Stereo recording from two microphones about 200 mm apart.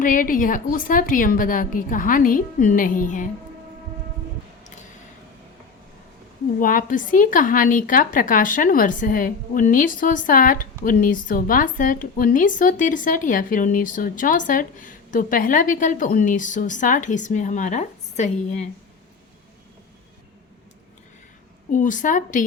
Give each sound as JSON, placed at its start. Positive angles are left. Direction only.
{"t": 0.0, "sound": "a woman's voice", "side_deg": 45}
{"t": 6.6, "sound": "a woman's voice", "side_deg": 45}
{"t": 21.7, "sound": "a woman's voice", "side_deg": 40}